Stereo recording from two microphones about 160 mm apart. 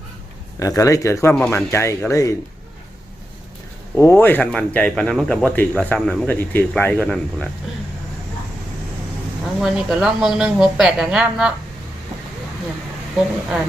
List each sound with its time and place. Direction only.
0.6 s speech: 20° left (ahead or behind)
3.9 s speech: 15° left (ahead or behind)
9.6 s a woman's voice: centre (ahead or behind)